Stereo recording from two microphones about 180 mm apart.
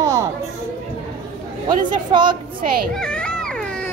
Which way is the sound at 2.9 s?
5° left (ahead or behind).